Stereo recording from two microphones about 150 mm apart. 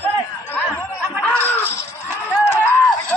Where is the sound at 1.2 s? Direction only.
10° left (ahead or behind).